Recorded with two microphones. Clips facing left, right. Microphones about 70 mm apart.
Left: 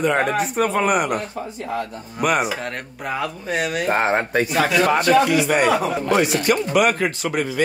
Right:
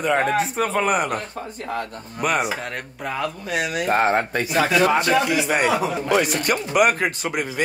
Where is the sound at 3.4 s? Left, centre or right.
Left.